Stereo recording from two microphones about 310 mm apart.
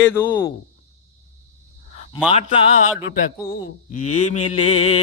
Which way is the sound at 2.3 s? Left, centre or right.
Centre.